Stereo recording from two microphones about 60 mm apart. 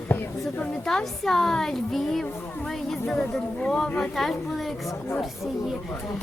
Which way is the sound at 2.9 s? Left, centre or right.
Centre.